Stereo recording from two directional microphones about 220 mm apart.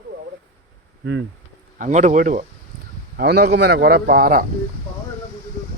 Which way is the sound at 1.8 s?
30° right (ahead or behind).